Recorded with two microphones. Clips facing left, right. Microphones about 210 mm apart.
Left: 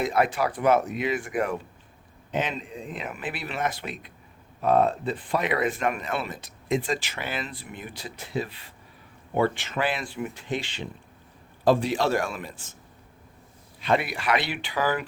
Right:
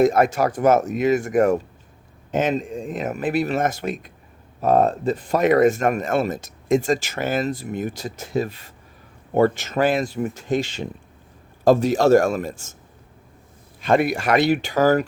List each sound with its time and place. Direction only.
0.0 s speech: 45° right (ahead or behind)
13.8 s speech: 45° right (ahead or behind)